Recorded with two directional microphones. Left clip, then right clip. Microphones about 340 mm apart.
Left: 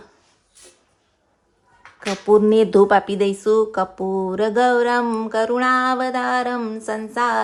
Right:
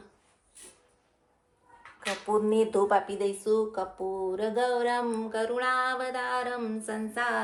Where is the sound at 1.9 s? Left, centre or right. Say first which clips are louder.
Left 12 dB; left.